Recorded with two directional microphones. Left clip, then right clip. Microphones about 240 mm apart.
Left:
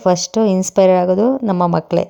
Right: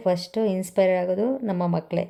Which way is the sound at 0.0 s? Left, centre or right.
Left.